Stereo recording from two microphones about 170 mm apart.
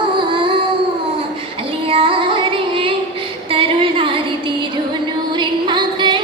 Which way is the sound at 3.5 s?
30° right (ahead or behind).